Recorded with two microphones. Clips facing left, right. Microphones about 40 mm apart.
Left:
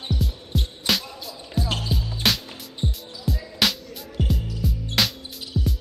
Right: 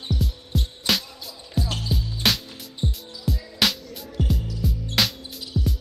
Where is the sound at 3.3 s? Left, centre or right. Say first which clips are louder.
Even; centre.